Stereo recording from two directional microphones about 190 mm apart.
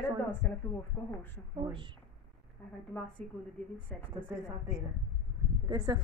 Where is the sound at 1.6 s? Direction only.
25° right (ahead or behind).